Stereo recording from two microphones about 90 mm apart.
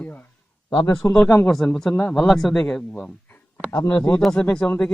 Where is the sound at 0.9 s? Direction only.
35° left (ahead or behind).